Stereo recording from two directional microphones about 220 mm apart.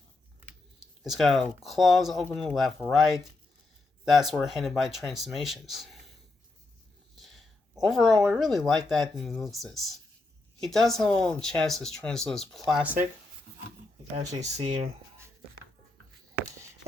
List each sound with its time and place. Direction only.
1.0 s speech: centre (ahead or behind)
7.2 s speech: centre (ahead or behind)
14.2 s speech: 30° right (ahead or behind)